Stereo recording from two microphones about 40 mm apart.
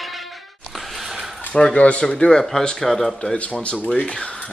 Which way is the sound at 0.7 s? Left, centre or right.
Centre.